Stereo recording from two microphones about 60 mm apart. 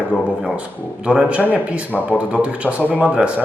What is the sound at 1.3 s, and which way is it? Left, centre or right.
A man's voice, right.